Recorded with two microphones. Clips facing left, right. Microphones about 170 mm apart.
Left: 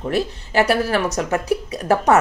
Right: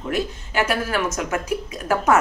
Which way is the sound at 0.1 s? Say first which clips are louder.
Left 3 dB; 35° left (ahead or behind).